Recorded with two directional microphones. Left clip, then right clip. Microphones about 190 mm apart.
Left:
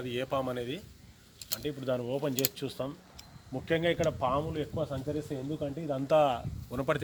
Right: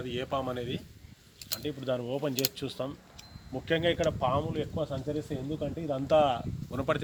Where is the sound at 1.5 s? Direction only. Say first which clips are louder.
Even; 15° left (ahead or behind).